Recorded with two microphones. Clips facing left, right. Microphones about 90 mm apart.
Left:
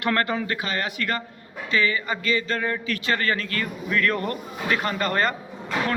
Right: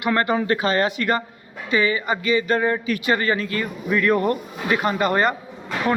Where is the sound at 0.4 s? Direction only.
35° right (ahead or behind).